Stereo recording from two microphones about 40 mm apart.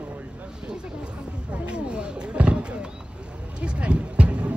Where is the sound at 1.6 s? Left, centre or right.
Right.